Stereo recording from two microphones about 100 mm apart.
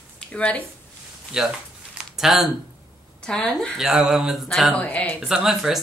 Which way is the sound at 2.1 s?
5° right (ahead or behind).